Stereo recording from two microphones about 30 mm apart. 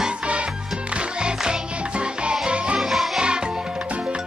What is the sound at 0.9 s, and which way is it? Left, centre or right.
Music, right.